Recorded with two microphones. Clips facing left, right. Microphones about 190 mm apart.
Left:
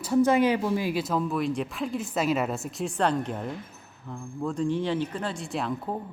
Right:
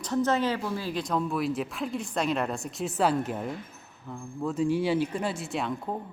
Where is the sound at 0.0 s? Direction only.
10° left (ahead or behind).